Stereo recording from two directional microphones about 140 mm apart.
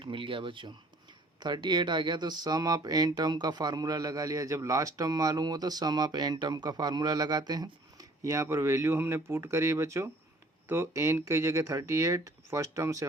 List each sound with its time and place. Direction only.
0.0 s speech: 35° right (ahead or behind)